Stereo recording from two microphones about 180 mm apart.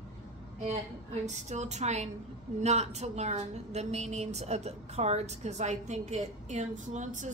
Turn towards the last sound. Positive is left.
turn(degrees=-45)  # may be behind; listen again after turning